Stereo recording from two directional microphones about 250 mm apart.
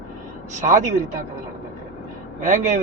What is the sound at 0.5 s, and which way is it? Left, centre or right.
Speech, right.